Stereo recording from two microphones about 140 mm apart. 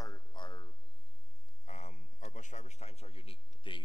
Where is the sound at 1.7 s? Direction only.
60° left (ahead or behind).